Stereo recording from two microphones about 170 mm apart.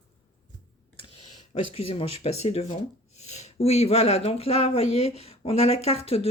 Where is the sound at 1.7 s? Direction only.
35° left (ahead or behind).